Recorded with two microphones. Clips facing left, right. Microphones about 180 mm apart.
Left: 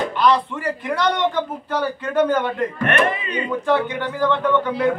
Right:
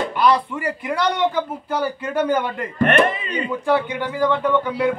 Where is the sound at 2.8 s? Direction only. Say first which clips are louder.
Right 5 dB; 35° right (ahead or behind).